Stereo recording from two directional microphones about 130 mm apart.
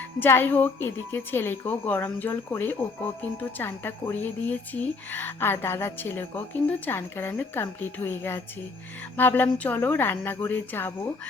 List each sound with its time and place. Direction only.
0.2 s speech: 15° left (ahead or behind)